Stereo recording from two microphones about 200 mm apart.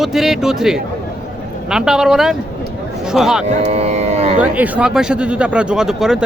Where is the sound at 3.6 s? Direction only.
30° right (ahead or behind).